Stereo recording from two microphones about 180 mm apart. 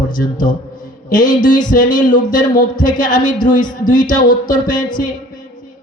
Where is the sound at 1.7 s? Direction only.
45° left (ahead or behind).